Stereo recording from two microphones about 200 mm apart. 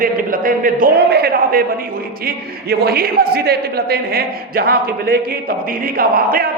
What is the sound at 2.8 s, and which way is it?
A man's voice, 50° right (ahead or behind).